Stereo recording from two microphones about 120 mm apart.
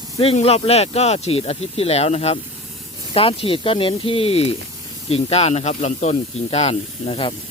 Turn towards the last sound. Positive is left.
turn(degrees=50)  # may be behind; listen again after turning